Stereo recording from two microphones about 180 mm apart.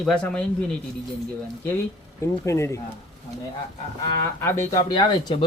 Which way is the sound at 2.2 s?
15° left (ahead or behind).